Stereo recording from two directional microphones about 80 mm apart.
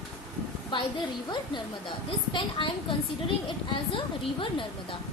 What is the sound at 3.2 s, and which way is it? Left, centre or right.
A woman's voice, left.